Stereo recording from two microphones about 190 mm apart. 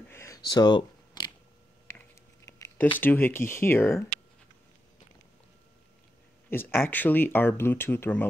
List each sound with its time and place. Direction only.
0.1 s a sound: 15° left (ahead or behind)
2.4 s speech: 15° left (ahead or behind)
6.5 s speech: 10° left (ahead or behind)